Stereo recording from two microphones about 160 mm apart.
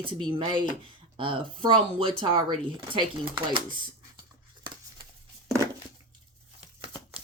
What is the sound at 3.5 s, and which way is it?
Speech, 30° right (ahead or behind).